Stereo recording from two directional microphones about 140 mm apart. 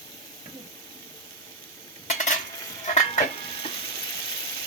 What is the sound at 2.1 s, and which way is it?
Stir, 60° left (ahead or behind).